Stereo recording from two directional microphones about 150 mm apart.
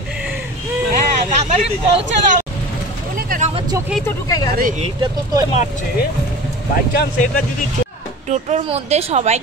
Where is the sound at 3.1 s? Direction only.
65° right (ahead or behind).